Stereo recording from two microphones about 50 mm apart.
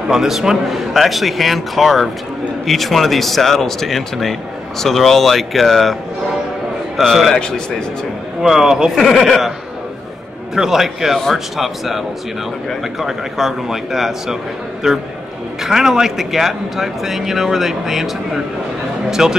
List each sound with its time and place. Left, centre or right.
0.1 s speech: centre
7.0 s speech: centre
7.3 s a man's voice: centre
8.4 s a man's voice: centre
8.9 s speech: centre
10.5 s a man's voice: centre
13.0 s a man's voice: centre